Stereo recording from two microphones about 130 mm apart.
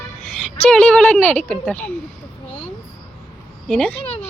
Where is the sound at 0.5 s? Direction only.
10° left (ahead or behind).